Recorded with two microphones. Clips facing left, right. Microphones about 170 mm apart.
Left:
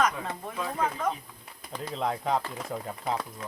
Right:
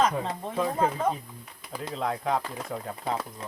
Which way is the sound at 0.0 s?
25° right (ahead or behind).